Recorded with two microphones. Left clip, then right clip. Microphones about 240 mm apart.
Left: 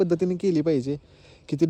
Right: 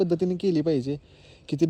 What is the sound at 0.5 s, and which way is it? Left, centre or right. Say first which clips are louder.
Speech: left 1 dB; left.